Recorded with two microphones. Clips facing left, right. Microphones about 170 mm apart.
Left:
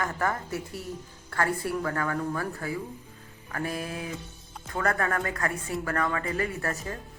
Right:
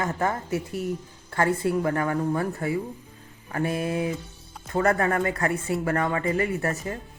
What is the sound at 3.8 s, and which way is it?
Speech, 25° right (ahead or behind).